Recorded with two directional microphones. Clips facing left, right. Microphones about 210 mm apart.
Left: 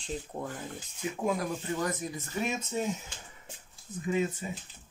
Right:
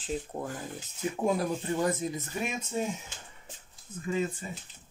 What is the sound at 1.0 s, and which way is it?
Speech, 40° right (ahead or behind).